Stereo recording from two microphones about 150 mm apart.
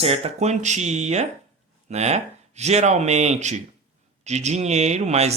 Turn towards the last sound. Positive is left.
turn(degrees=-45)  # may be behind; listen again after turning